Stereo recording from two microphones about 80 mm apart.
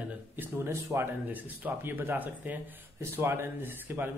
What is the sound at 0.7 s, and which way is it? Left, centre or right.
Speech, right.